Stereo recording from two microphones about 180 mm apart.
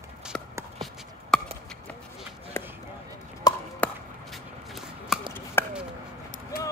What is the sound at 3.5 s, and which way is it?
Chop, 20° left (ahead or behind).